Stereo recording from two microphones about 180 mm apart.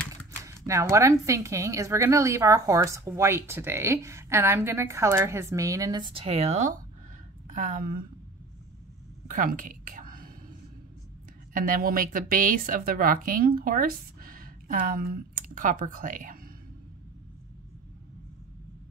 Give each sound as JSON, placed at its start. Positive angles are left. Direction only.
{"t": 0.1, "sound": "a woman's voice", "side_deg": -15}
{"t": 9.3, "sound": "a sound", "side_deg": -50}
{"t": 11.5, "sound": "a woman's voice", "side_deg": -50}